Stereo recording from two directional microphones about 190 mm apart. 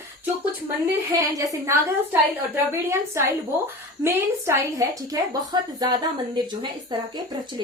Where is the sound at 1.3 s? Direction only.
15° right (ahead or behind).